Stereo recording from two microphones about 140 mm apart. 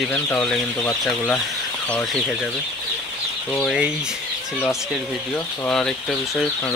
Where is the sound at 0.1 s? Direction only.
10° left (ahead or behind).